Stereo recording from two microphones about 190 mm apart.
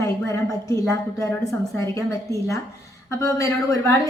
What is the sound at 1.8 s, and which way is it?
A woman's voice, 15° left (ahead or behind).